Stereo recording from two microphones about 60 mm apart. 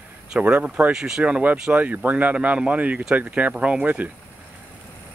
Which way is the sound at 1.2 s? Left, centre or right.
Right.